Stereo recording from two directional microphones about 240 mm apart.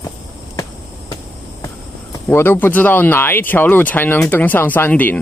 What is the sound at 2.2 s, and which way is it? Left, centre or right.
Speech, centre.